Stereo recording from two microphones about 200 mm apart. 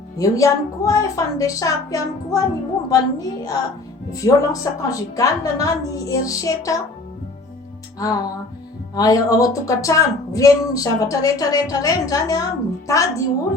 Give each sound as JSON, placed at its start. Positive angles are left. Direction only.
{"t": 0.2, "sound": "speech", "side_deg": 15}
{"t": 7.9, "sound": "speech", "side_deg": 15}